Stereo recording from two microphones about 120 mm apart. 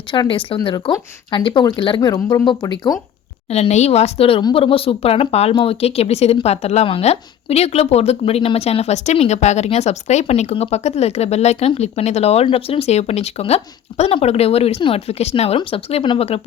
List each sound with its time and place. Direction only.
0.1 s speech: 45° left (ahead or behind)
3.5 s speech: 65° left (ahead or behind)